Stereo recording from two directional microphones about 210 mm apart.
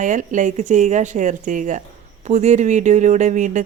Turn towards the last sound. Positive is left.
turn(degrees=-35)  # may be behind; listen again after turning